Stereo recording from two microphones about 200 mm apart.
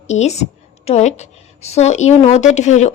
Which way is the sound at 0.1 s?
35° left (ahead or behind).